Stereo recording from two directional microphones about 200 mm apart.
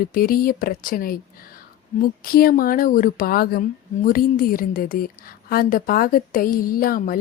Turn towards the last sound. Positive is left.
turn(degrees=45)  # may be behind; listen again after turning